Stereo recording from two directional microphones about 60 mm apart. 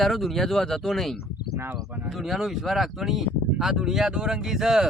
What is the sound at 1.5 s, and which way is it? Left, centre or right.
Speech, right.